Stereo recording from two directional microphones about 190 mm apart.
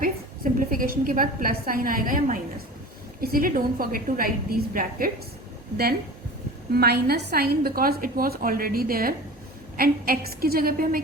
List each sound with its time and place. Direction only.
0.0 s a woman's voice: 50° right (ahead or behind)
6.7 s a woman's voice: 55° right (ahead or behind)